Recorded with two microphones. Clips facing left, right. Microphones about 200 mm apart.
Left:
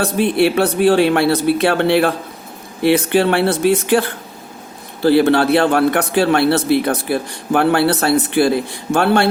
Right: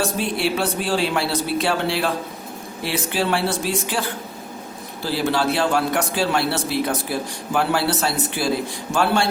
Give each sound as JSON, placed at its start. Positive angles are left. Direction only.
{"t": 0.0, "sound": "a man's voice", "side_deg": 60}
{"t": 5.0, "sound": "a man's voice", "side_deg": 60}